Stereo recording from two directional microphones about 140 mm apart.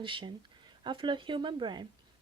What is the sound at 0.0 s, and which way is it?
Speech, 35° right (ahead or behind).